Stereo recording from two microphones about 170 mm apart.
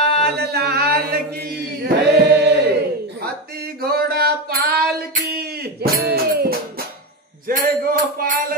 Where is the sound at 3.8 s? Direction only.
65° right (ahead or behind).